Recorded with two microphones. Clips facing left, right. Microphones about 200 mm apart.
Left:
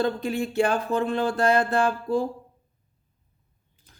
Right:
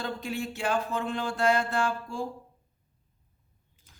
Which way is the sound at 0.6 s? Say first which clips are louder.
Left 7 dB; 55° left (ahead or behind).